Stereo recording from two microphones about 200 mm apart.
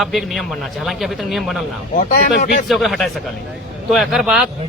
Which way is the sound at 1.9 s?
40° left (ahead or behind).